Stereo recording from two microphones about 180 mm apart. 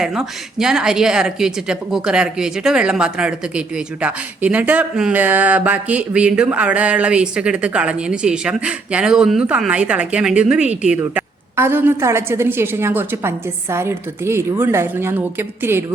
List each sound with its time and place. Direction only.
0.0 s a woman's voice: 5° right (ahead or behind)